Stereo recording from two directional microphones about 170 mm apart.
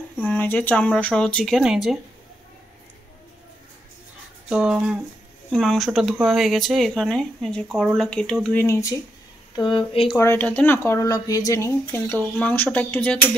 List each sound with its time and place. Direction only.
0.2 s speech: 10° left (ahead or behind)
4.5 s speech: 5° right (ahead or behind); by 8.9 s 15° left (ahead or behind)
9.6 s speech: 30° left (ahead or behind)
10.1 s speech: 15° left (ahead or behind)